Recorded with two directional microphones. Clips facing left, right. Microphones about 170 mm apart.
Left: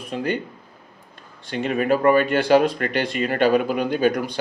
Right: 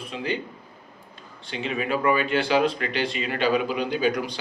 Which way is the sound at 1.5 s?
50° left (ahead or behind).